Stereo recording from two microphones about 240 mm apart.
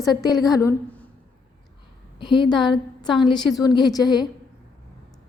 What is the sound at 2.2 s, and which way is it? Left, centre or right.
A woman's voice, centre.